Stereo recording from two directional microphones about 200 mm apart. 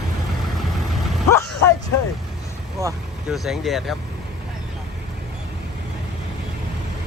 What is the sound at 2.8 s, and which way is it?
Speech, 15° right (ahead or behind).